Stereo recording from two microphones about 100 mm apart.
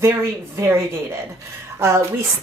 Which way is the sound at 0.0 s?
30° right (ahead or behind).